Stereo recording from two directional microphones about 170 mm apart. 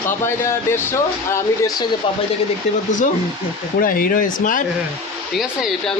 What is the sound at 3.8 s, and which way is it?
Speech, 55° left (ahead or behind).